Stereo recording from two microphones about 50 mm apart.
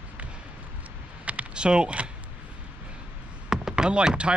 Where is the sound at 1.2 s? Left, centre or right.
Right.